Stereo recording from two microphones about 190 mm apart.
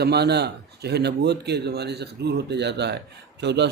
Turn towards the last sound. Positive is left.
turn(degrees=-65)  # may be behind; listen again after turning